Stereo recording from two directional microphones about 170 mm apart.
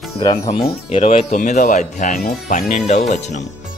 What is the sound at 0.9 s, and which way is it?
A man's voice, 35° left (ahead or behind).